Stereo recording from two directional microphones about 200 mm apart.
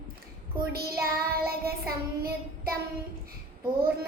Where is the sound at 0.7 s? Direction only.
50° right (ahead or behind).